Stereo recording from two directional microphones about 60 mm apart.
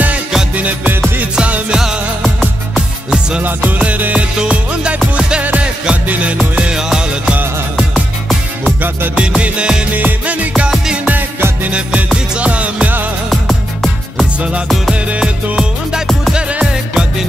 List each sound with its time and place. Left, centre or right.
0.6 s music: right
1.8 s music: centre
3.4 s music: right
8.8 s music: right
9.2 s music: centre
12.4 s music: right
15.0 s music: right